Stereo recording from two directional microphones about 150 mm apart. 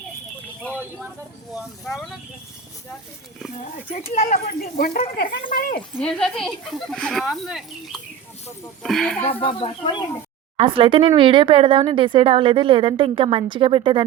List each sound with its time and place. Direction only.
1.9 s speech: centre (ahead or behind)
4.1 s speech: 75° left (ahead or behind)
5.5 s speech: 65° left (ahead or behind)
6.0 s speech: 5° left (ahead or behind)
9.2 s speech: 35° left (ahead or behind)
10.6 s speech: 35° right (ahead or behind)